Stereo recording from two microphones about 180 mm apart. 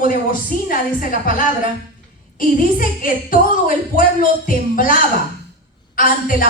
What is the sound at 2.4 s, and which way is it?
A woman's voice, 50° left (ahead or behind).